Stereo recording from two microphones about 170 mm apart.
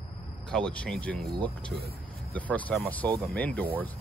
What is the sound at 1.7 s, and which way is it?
Speech, 65° right (ahead or behind).